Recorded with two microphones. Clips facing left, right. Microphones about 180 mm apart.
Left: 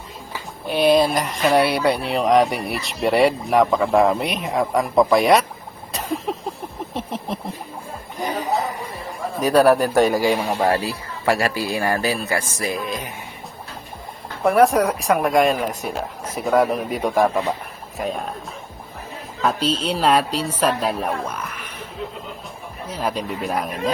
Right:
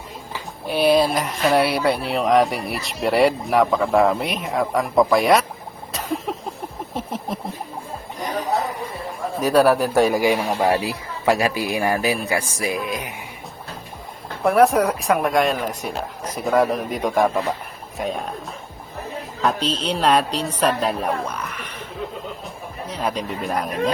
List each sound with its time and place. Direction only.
0.7 s speech: 5° right (ahead or behind)
6.3 s a sound: centre (ahead or behind)
9.4 s speech: centre (ahead or behind)
14.4 s speech: centre (ahead or behind)
19.4 s speech: 5° left (ahead or behind)
22.9 s speech: centre (ahead or behind)